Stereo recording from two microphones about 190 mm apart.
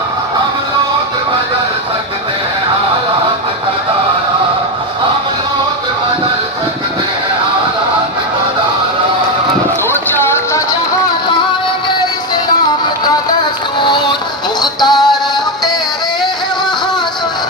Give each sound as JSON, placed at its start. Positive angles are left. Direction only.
{"t": 10.2, "sound": "music", "side_deg": 15}
{"t": 13.8, "sound": "music", "side_deg": 25}